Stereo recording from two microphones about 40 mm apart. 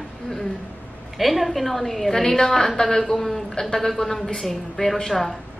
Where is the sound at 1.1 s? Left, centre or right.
Centre.